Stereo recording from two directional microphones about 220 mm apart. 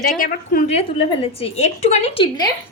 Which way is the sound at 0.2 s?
40° left (ahead or behind).